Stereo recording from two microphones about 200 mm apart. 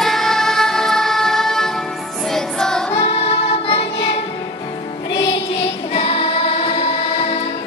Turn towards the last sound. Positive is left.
turn(degrees=30)  # may be behind; listen again after turning